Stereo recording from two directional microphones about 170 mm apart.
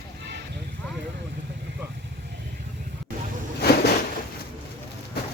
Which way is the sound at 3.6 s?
70° left (ahead or behind).